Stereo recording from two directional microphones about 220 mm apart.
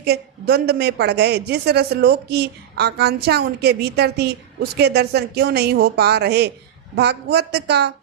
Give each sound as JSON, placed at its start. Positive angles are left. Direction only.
{"t": 0.0, "sound": "a woman's voice", "side_deg": -45}